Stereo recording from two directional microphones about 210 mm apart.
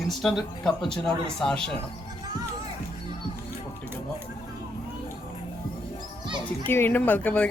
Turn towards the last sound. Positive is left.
turn(degrees=10)  # may be behind; listen again after turning